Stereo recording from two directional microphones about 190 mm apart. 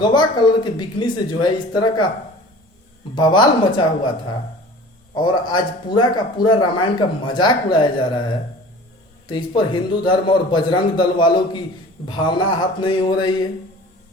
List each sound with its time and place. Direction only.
0.0 s speech: 25° left (ahead or behind)
3.2 s speech: 25° left (ahead or behind)